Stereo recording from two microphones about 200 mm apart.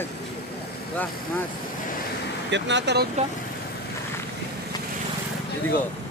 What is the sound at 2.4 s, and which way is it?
Speech, 60° right (ahead or behind).